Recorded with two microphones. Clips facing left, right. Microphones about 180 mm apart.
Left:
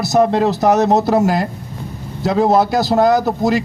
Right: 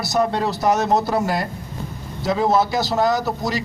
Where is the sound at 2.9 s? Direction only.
50° left (ahead or behind).